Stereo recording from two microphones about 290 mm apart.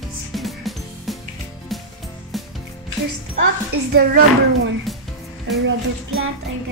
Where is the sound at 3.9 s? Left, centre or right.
Right.